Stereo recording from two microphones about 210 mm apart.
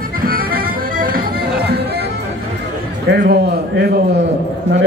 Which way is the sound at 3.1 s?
50° right (ahead or behind).